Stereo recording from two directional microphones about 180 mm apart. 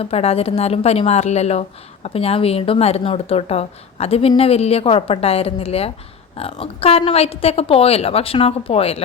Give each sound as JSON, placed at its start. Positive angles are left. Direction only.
{"t": 0.0, "sound": "speech", "side_deg": 35}